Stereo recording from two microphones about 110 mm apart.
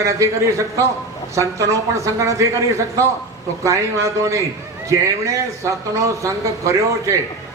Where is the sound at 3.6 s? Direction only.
30° right (ahead or behind).